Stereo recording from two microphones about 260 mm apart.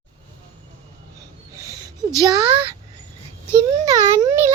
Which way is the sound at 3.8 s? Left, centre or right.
Centre.